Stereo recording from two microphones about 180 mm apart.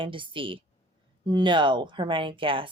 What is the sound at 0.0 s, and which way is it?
A woman's voice, 30° right (ahead or behind).